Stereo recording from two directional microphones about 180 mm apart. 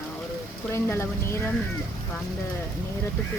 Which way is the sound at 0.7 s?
15° left (ahead or behind).